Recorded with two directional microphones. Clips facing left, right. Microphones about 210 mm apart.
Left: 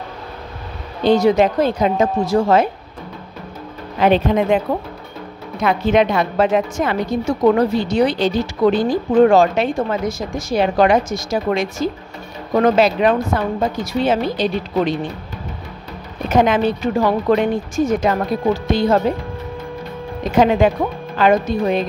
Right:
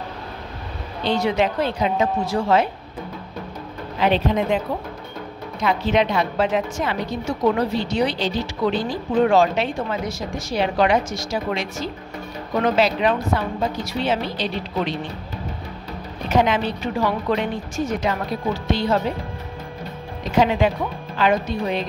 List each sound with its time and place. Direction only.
1.0 s a woman's voice: 45° left (ahead or behind)
4.0 s a woman's voice: 50° left (ahead or behind)
5.6 s a woman's voice: 50° left (ahead or behind)
16.3 s a woman's voice: 50° left (ahead or behind)
20.2 s a woman's voice: 50° left (ahead or behind)